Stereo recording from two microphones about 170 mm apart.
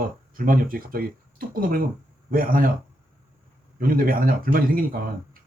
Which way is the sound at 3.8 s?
55° right (ahead or behind).